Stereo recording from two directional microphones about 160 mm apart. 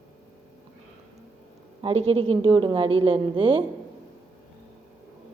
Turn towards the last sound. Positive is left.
turn(degrees=-35)  # may be behind; listen again after turning